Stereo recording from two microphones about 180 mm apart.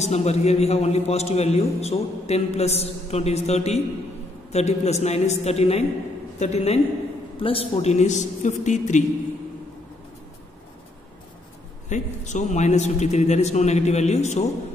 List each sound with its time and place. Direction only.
0.0 s a man's voice: 35° left (ahead or behind)
11.9 s a man's voice: 40° left (ahead or behind)